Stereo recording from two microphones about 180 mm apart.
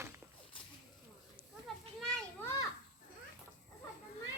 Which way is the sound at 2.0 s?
5° left (ahead or behind).